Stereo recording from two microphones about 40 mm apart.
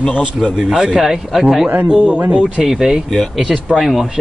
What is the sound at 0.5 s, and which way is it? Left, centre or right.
Speech, right.